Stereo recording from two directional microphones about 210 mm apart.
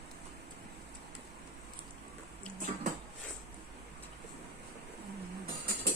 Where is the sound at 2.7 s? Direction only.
35° right (ahead or behind).